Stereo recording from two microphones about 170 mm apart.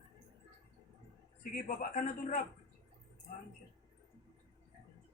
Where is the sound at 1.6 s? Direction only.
50° left (ahead or behind).